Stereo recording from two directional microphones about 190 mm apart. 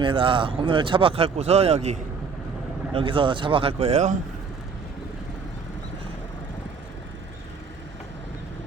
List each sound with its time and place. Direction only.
0.0 s speech: 25° right (ahead or behind)